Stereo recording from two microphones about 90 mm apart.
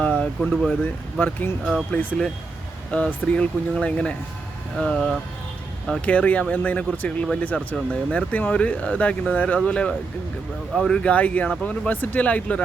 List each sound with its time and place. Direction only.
0.0 s a sound: 10° left (ahead or behind)
0.5 s speech: centre (ahead or behind)
1.2 s speech: 20° left (ahead or behind)